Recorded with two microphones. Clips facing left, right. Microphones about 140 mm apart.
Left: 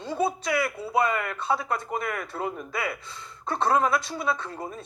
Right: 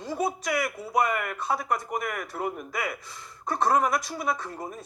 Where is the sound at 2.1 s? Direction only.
30° left (ahead or behind).